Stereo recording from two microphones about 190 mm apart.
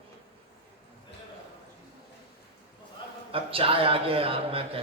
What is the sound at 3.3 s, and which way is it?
A man's voice, 30° right (ahead or behind).